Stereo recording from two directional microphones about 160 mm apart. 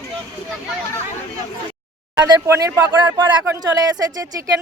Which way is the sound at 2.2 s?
20° right (ahead or behind).